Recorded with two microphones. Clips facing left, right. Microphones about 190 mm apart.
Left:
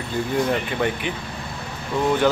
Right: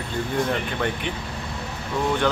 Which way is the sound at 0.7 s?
5° left (ahead or behind).